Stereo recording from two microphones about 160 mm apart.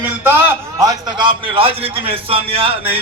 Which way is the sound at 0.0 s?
15° right (ahead or behind).